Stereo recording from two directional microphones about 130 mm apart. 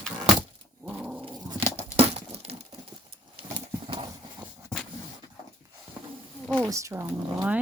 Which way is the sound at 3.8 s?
40° right (ahead or behind).